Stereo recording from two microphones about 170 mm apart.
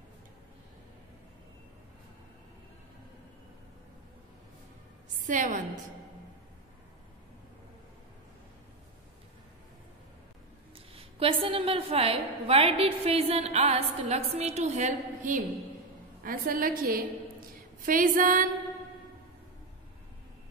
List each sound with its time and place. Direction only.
5.2 s a woman's voice: 50° right (ahead or behind)
11.0 s a woman's voice: 35° right (ahead or behind); by 18.5 s 55° right (ahead or behind)